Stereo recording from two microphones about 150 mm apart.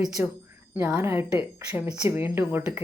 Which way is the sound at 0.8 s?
10° right (ahead or behind).